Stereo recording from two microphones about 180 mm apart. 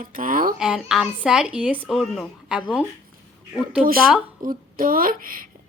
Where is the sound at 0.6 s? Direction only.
5° right (ahead or behind).